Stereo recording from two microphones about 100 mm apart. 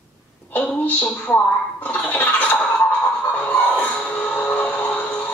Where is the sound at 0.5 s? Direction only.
15° left (ahead or behind).